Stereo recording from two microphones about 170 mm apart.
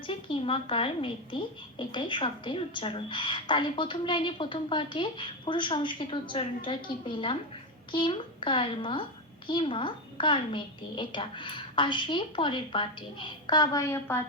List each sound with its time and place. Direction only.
0.1 s a woman's voice: 30° left (ahead or behind); by 14.2 s 15° left (ahead or behind)